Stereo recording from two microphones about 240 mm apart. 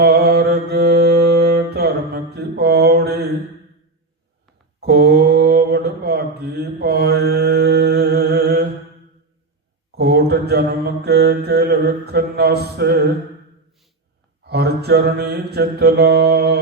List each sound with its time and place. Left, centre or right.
0.0 s mantra: right
4.8 s mantra: right
9.9 s mantra: right
14.4 s mantra: right